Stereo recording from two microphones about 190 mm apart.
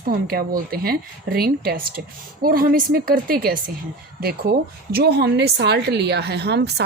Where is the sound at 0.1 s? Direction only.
55° right (ahead or behind).